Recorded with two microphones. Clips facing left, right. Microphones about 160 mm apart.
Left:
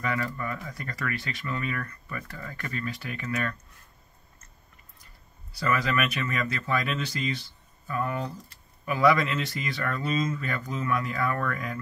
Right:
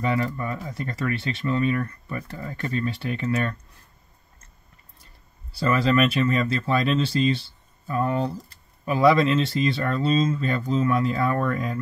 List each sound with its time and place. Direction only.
0.0 s speech: 25° right (ahead or behind)
5.5 s speech: 30° right (ahead or behind)